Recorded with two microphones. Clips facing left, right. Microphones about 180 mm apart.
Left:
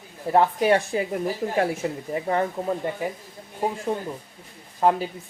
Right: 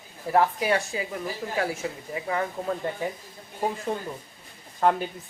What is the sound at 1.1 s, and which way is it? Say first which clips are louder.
Speech: left 5 dB; 40° left (ahead or behind).